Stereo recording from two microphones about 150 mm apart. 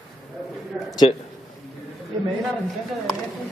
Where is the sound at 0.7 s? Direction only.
5° right (ahead or behind).